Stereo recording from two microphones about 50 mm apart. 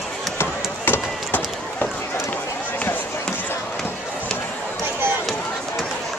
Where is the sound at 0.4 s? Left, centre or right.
Left.